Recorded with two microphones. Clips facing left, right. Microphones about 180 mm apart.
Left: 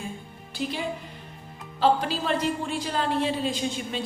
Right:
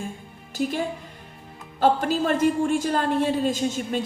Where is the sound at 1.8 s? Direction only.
50° right (ahead or behind).